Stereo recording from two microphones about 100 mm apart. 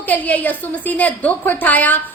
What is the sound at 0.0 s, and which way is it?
A woman's voice, 15° left (ahead or behind).